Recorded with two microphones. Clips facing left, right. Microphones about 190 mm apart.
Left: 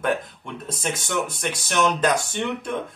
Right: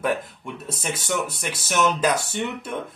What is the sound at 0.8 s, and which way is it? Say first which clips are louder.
A man's voice: even; 5° right (ahead or behind).